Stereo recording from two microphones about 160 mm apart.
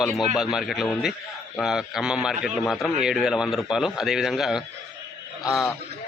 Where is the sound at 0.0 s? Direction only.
Centre (ahead or behind).